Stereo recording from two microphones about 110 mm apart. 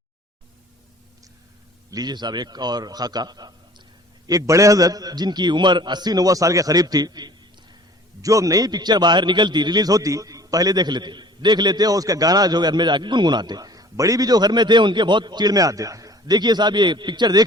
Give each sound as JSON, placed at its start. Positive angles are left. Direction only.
{"t": 1.9, "sound": "a man's voice", "side_deg": -40}